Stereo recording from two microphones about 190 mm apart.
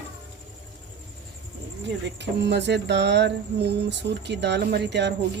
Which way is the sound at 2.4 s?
65° right (ahead or behind).